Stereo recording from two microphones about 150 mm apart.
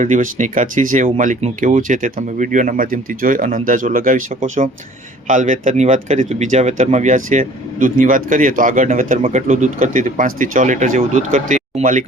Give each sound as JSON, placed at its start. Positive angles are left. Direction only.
{"t": 0.0, "sound": "speech", "side_deg": -55}